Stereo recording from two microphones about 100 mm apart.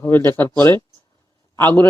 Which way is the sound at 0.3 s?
25° left (ahead or behind).